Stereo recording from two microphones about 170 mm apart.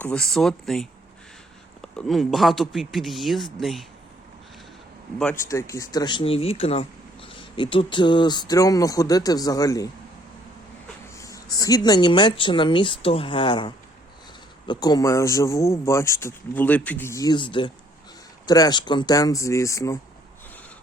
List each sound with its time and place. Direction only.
0.0 s speech: 5° left (ahead or behind)
2.0 s speech: centre (ahead or behind)
5.2 s speech: 15° left (ahead or behind)
11.1 s a sound: 20° left (ahead or behind)
11.5 s a man's voice: 20° left (ahead or behind)